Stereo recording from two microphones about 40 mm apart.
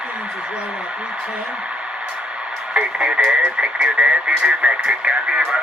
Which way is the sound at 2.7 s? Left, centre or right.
Right.